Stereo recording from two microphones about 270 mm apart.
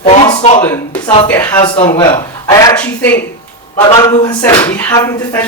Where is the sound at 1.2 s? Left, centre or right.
Centre.